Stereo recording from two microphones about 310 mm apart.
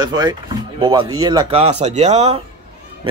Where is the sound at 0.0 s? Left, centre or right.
Centre.